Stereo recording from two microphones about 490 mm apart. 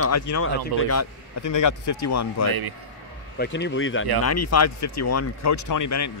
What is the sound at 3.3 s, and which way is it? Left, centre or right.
A man's voice, left.